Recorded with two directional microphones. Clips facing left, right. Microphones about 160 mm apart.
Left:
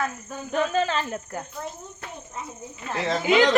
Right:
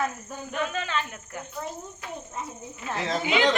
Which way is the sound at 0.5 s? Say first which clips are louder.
Left 6 dB; 35° left (ahead or behind).